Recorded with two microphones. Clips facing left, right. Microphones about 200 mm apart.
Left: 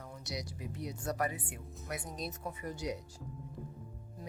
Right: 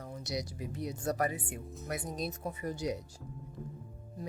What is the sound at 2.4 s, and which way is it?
Speech, 35° right (ahead or behind).